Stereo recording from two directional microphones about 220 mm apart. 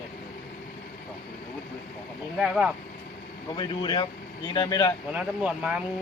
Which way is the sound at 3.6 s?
20° left (ahead or behind).